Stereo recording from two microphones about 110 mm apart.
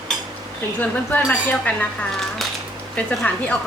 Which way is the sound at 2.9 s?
10° left (ahead or behind).